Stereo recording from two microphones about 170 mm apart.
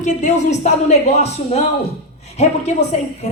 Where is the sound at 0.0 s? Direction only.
45° left (ahead or behind).